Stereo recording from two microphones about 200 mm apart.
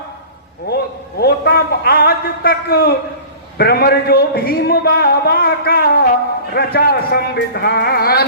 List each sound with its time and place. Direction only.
1.2 s a man's voice: 50° left (ahead or behind)